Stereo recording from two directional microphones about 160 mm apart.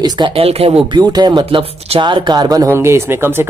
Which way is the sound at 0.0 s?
25° right (ahead or behind).